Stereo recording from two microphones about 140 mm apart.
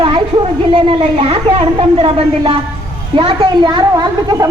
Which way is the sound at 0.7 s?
40° right (ahead or behind).